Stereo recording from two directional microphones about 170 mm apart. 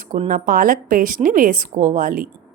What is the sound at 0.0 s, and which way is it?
A woman's voice, 50° right (ahead or behind).